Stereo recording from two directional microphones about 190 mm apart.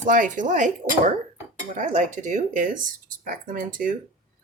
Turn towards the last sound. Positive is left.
turn(degrees=-45)  # may be behind; listen again after turning